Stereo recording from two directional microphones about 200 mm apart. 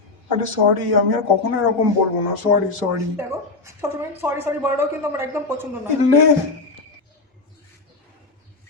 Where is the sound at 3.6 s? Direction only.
10° right (ahead or behind).